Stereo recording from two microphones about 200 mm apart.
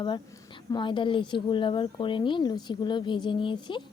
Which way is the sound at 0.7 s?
25° left (ahead or behind).